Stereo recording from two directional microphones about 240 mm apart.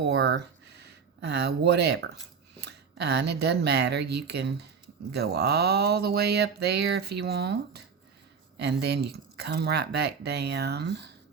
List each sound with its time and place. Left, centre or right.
0.0 s speech: right